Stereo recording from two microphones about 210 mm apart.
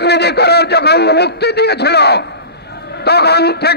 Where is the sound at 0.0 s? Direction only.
50° left (ahead or behind).